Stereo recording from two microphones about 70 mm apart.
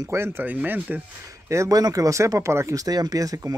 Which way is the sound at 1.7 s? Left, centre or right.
Right.